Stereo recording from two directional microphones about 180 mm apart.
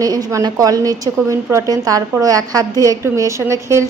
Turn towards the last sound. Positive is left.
turn(degrees=-15)  # may be behind; listen again after turning